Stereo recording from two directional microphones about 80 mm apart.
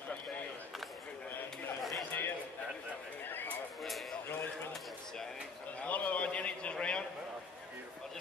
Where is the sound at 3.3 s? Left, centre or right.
Left.